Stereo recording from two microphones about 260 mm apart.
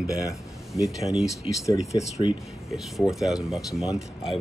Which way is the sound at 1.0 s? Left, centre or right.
Centre.